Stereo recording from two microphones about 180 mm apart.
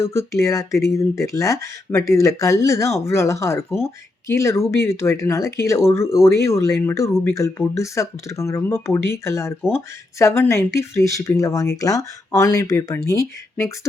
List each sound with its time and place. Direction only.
0.1 s speech: 15° left (ahead or behind)